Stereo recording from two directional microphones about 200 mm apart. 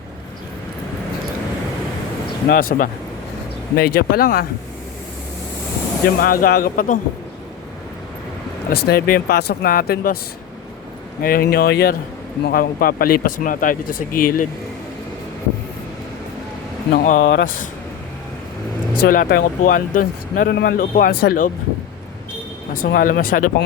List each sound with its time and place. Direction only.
2.5 s speech: 45° left (ahead or behind)
6.2 s speech: 45° left (ahead or behind)
8.7 s speech: 50° left (ahead or behind)
11.2 s speech: 45° left (ahead or behind)
16.9 s speech: 40° left (ahead or behind)
17.2 s speech: 60° left (ahead or behind)
19.0 s speech: 45° left (ahead or behind)
22.7 s speech: 45° left (ahead or behind)